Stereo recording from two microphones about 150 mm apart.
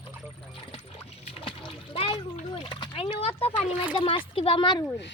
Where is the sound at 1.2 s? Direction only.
40° left (ahead or behind).